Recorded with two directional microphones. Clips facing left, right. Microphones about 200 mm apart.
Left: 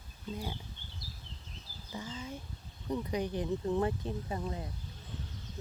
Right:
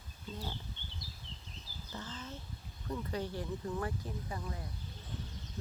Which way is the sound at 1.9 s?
10° left (ahead or behind).